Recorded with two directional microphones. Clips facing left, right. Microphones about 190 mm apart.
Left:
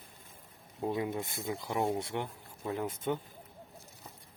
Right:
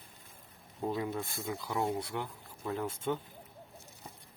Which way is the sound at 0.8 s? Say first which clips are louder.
Left 1 dB; 20° left (ahead or behind).